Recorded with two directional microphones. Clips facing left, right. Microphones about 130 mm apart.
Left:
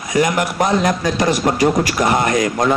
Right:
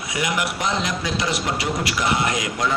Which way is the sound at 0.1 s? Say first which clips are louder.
Left 8 dB; 45° left (ahead or behind).